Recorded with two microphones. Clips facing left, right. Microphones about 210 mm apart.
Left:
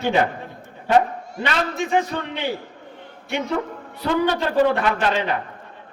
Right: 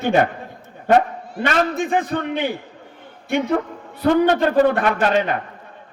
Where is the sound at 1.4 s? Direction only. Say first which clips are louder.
Right 4 dB; 50° right (ahead or behind).